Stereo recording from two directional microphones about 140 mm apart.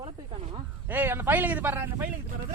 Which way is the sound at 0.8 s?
10° right (ahead or behind).